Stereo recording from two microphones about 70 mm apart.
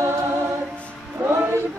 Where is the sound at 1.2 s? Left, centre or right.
Right.